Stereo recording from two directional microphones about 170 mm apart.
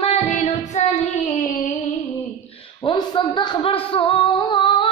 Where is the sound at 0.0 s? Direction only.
40° left (ahead or behind).